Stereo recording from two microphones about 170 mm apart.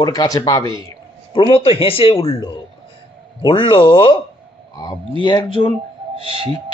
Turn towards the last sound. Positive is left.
turn(degrees=-35)  # may be behind; listen again after turning